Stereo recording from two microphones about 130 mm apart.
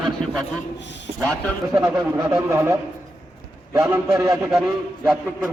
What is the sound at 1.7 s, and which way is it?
A man's voice, 25° right (ahead or behind).